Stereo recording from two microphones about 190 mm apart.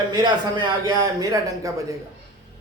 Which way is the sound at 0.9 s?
20° right (ahead or behind).